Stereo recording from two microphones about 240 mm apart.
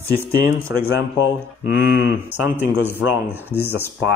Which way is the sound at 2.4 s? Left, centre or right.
Centre.